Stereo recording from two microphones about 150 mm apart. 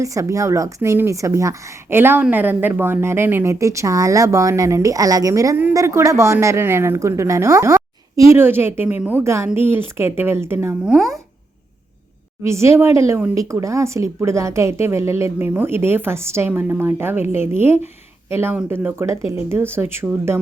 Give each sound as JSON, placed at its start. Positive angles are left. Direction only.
{"t": 0.0, "sound": "speech", "side_deg": -20}
{"t": 12.4, "sound": "speech", "side_deg": -20}